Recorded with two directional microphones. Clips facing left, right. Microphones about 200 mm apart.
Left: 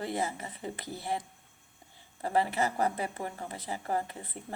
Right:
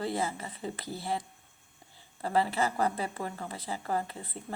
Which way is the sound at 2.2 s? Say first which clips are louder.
Even; 20° left (ahead or behind).